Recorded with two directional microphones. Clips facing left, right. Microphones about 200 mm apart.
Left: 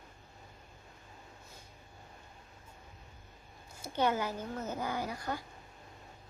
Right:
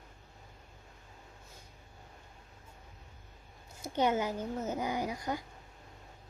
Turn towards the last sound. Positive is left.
turn(degrees=-15)  # may be behind; listen again after turning